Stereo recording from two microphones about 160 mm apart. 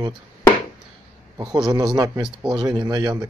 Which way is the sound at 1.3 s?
25° right (ahead or behind).